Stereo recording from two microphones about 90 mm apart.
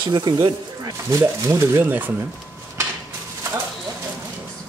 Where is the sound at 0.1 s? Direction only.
55° right (ahead or behind).